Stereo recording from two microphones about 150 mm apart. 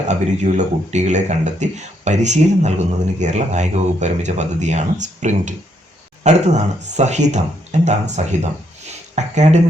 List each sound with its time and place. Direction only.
0.1 s speech: 50° right (ahead or behind)